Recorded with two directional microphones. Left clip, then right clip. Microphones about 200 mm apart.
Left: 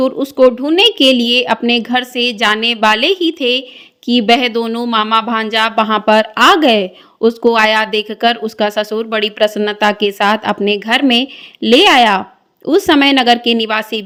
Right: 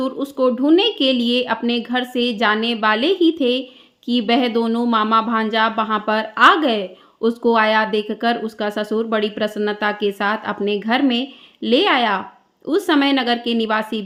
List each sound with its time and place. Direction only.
0.0 s speech: 35° left (ahead or behind)